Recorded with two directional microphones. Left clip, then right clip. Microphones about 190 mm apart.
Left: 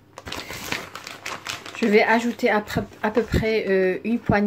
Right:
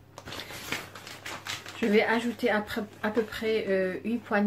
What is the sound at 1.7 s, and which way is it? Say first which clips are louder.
Speech: left 7 dB; 35° left (ahead or behind).